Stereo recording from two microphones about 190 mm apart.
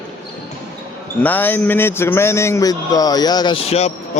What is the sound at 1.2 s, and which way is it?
A man's voice, 10° left (ahead or behind).